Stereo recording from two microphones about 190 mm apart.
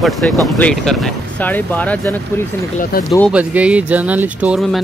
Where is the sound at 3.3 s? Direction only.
10° right (ahead or behind).